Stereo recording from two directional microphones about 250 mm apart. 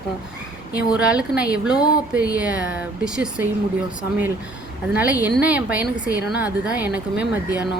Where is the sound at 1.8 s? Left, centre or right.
Centre.